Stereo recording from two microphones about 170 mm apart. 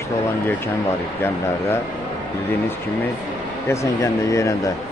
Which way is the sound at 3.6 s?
15° left (ahead or behind).